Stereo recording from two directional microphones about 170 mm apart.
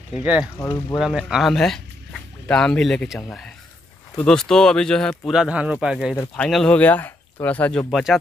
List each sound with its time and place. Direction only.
0.2 s speech: 10° right (ahead or behind)
0.6 s speech: 20° left (ahead or behind)
0.9 s speech: centre (ahead or behind)
6.1 s speech: 5° left (ahead or behind)